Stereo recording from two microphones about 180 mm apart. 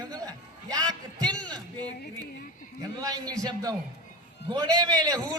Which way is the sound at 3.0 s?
20° right (ahead or behind).